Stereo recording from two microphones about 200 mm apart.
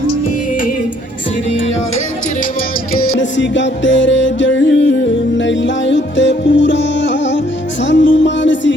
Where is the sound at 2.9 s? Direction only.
55° left (ahead or behind).